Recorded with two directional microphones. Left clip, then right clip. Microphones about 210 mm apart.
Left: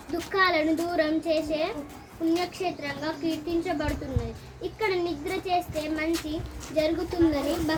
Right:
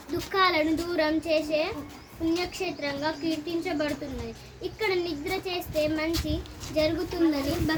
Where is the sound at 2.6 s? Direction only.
50° right (ahead or behind).